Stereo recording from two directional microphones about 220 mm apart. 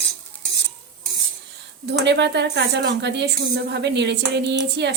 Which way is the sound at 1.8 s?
50° right (ahead or behind).